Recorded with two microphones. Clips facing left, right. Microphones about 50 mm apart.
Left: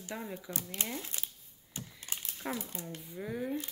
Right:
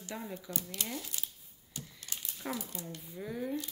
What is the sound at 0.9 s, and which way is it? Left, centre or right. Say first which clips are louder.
Speech: left 1 dB; left.